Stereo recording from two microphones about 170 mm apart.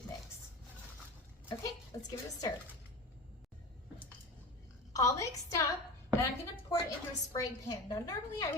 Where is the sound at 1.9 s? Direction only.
20° left (ahead or behind).